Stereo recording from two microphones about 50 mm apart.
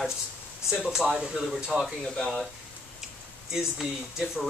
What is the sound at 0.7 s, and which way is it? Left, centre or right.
Speech, centre.